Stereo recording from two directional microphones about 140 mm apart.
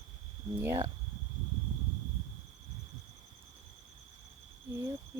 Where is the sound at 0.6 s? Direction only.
20° right (ahead or behind).